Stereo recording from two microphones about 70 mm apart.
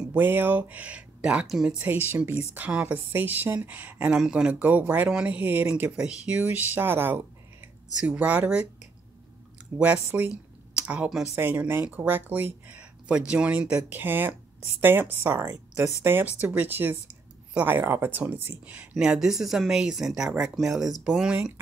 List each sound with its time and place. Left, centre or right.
0.2 s speech: right; by 1.9 s centre
1.9 s speech: right
4.1 s speech: centre
4.5 s speech: right
5.8 s speech: centre
10.1 s a sound: right
11.3 s speech: right
13.9 s speech: right
15.3 s speech: centre
16.0 s speech: right
18.9 s speech: centre